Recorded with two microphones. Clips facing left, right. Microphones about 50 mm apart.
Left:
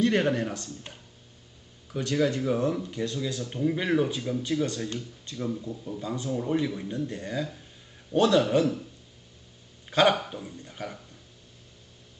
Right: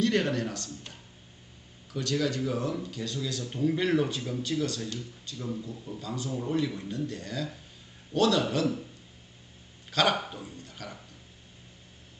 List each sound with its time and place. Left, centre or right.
0.0 s speech: centre
3.2 s speech: centre
4.4 s speech: left
9.9 s speech: centre
10.6 s a sound: left